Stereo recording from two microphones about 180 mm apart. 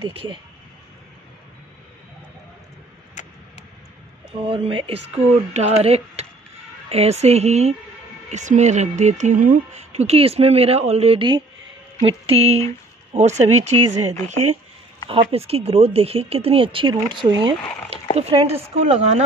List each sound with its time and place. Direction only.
0.0 s speech: 30° right (ahead or behind)
4.3 s speech: 30° right (ahead or behind)
15.0 s speech: 30° right (ahead or behind)